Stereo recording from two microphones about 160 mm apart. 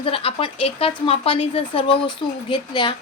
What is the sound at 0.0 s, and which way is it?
Speech, 35° left (ahead or behind).